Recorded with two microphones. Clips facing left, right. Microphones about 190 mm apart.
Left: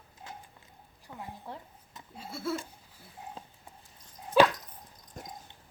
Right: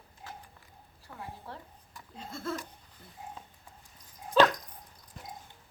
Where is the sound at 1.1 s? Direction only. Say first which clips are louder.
Left 1 dB; 15° left (ahead or behind).